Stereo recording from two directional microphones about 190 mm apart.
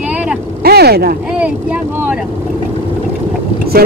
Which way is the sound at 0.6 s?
55° right (ahead or behind).